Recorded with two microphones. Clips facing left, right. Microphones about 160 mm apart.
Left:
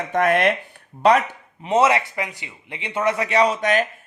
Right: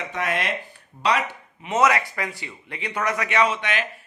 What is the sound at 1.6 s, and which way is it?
Speech, 30° left (ahead or behind).